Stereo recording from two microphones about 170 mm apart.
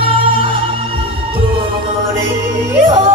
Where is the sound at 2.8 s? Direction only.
30° right (ahead or behind).